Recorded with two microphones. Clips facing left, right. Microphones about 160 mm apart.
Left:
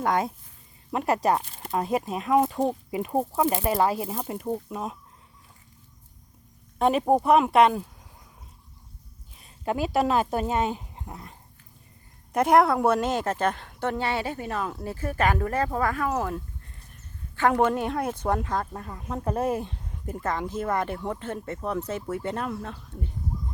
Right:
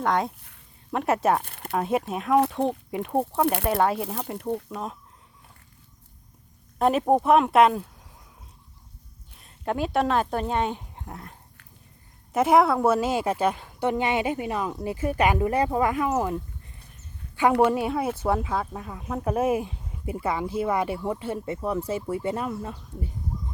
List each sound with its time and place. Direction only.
0.0 s speech: centre (ahead or behind)
1.4 s speech: 55° right (ahead or behind)
1.6 s speech: centre (ahead or behind)
3.4 s speech: 65° right (ahead or behind)
3.7 s speech: centre (ahead or behind)
6.7 s speech: centre (ahead or behind)
9.3 s speech: centre (ahead or behind)